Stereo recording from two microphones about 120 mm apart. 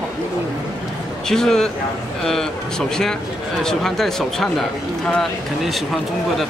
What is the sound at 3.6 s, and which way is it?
Speech, 5° left (ahead or behind).